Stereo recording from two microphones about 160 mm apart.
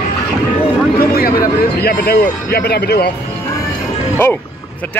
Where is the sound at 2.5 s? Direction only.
80° left.